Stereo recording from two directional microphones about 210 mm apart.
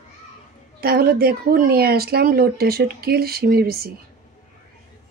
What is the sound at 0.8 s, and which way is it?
Speech, 45° right (ahead or behind).